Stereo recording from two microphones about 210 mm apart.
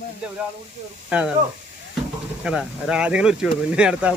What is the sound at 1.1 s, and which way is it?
Speech, 5° right (ahead or behind).